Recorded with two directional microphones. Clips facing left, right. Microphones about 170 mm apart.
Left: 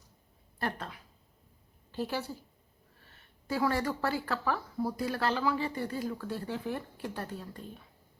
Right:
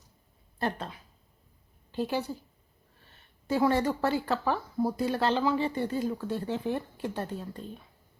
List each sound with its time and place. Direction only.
0.6 s a woman's voice: 25° right (ahead or behind)
3.4 s speech: 25° right (ahead or behind)